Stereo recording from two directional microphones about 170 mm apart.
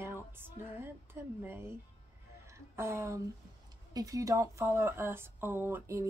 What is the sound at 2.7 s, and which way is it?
A woman's voice, 15° right (ahead or behind).